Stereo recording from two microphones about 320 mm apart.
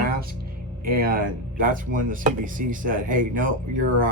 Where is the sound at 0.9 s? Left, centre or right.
Right.